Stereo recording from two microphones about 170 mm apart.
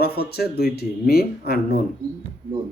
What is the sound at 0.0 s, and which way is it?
Speech, 70° left (ahead or behind).